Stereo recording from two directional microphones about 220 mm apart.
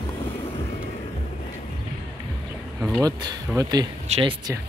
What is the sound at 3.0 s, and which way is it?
Speech, 20° right (ahead or behind).